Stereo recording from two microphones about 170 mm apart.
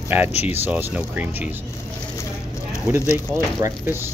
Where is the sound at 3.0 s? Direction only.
15° left (ahead or behind).